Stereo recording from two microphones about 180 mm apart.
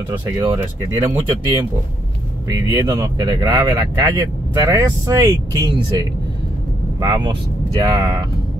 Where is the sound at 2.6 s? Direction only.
20° right (ahead or behind).